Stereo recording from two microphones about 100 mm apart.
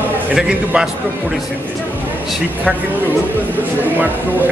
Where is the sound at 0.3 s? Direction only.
5° right (ahead or behind).